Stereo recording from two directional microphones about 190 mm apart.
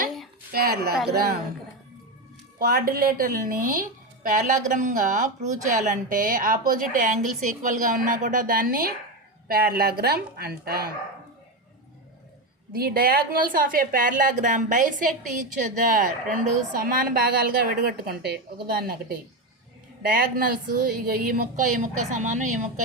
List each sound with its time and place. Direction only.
0.5 s a woman's voice: 55° right (ahead or behind)
2.6 s a woman's voice: 50° right (ahead or behind)
12.7 s a woman's voice: 50° right (ahead or behind)